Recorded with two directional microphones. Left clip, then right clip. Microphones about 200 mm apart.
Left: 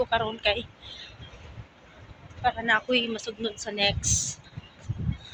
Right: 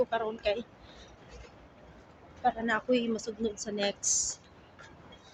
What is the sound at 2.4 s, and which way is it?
Speech, 10° right (ahead or behind).